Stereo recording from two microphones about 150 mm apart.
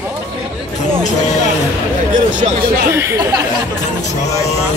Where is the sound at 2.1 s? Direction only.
60° right (ahead or behind).